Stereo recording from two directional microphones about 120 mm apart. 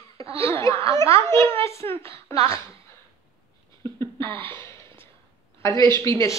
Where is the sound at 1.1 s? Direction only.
20° left (ahead or behind).